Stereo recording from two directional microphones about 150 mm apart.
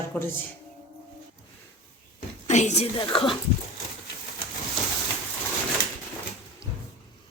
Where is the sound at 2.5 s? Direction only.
50° left (ahead or behind).